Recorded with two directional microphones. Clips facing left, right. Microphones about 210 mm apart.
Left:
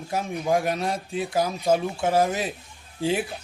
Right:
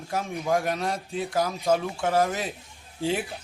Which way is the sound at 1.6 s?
20° left (ahead or behind).